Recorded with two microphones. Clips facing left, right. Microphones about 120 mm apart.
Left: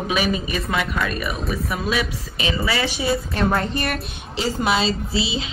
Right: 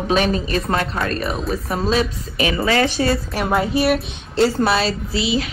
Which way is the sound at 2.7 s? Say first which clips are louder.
Right 6 dB; 10° left (ahead or behind).